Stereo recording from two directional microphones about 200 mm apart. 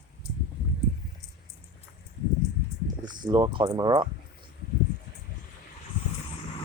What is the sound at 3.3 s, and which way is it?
Speech, 20° right (ahead or behind).